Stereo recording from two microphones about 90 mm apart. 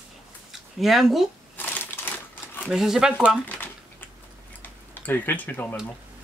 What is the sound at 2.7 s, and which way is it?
Speech, 5° right (ahead or behind).